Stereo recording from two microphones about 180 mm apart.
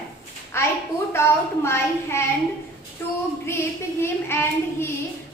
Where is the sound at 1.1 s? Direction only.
15° left (ahead or behind).